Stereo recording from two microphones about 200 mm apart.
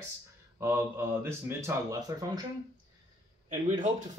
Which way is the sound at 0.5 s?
10° right (ahead or behind).